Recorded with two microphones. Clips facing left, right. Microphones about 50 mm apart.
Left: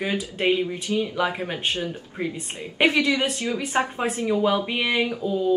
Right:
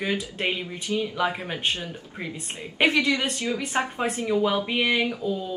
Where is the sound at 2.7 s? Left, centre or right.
Centre.